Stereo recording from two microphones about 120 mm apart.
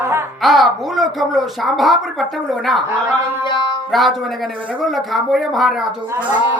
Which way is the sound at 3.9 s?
Centre (ahead or behind).